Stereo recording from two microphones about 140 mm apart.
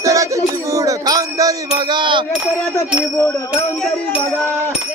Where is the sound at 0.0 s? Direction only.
25° right (ahead or behind).